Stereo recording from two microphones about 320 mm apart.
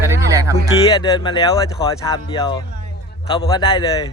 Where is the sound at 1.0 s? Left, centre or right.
Centre.